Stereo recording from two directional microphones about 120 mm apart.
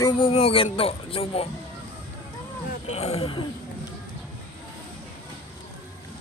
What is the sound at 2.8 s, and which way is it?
Speech, 65° left (ahead or behind).